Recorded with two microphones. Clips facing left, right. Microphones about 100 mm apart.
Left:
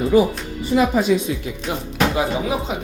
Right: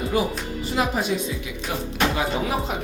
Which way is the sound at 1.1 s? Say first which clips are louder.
Left 7 dB; 90° left.